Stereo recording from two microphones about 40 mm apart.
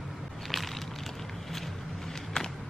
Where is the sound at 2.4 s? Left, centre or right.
Centre.